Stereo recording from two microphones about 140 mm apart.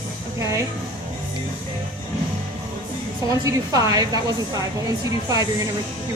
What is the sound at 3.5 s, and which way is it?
Speech, 25° right (ahead or behind).